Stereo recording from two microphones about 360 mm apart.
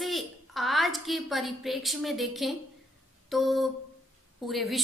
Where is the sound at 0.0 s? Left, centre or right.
Centre.